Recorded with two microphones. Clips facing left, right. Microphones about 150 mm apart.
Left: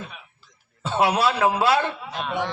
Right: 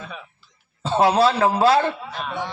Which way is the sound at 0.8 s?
30° right (ahead or behind).